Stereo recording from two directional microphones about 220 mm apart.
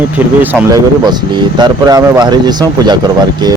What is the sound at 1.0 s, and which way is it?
Speech, 20° right (ahead or behind).